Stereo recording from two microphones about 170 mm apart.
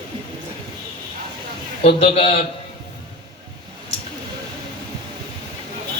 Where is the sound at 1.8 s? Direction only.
35° left (ahead or behind).